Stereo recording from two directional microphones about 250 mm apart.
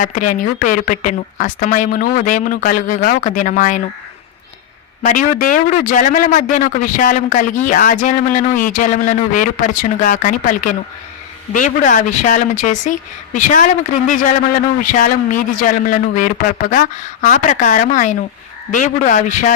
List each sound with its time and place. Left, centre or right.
0.0 s speech: left
5.0 s speech: left
14.8 s speech: left